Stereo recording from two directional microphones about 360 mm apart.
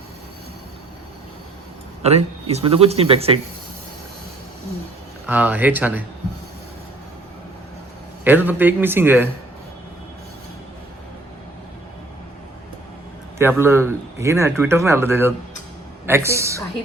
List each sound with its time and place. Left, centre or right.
2.0 s a man's voice: centre
5.3 s a man's voice: centre
8.2 s a man's voice: centre
13.4 s a man's voice: centre